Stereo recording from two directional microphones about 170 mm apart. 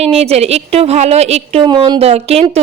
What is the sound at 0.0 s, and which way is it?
A woman's voice, 35° right (ahead or behind).